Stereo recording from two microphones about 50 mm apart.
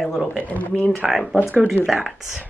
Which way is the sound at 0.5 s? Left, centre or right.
Left.